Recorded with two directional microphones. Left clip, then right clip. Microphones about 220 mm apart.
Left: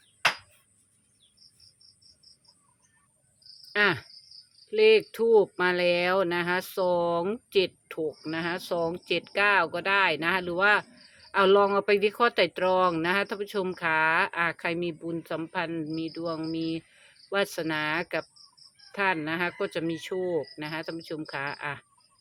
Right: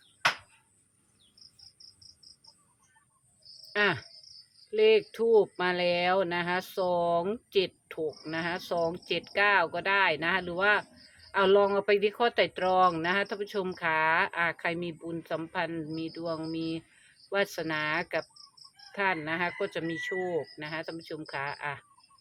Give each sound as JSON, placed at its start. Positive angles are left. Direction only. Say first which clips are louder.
{"t": 3.7, "sound": "cricket", "louder": "left 3 dB", "side_deg": 20}
{"t": 4.7, "sound": "speech", "louder": "left 3 dB", "side_deg": 20}